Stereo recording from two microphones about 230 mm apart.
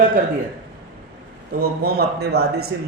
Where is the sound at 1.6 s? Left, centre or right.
Right.